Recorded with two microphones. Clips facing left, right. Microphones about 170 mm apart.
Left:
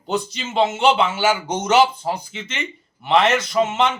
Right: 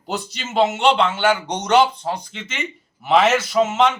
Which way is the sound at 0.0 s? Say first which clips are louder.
Left 4 dB; centre (ahead or behind).